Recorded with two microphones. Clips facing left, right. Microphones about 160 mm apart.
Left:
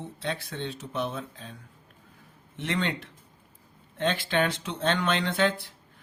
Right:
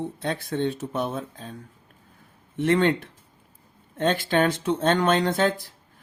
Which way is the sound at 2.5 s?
50° right (ahead or behind).